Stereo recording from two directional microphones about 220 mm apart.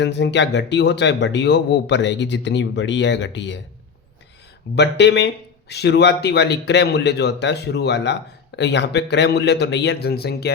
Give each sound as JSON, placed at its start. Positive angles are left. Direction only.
{"t": 0.0, "sound": "speech", "side_deg": 50}
{"t": 4.7, "sound": "speech", "side_deg": 50}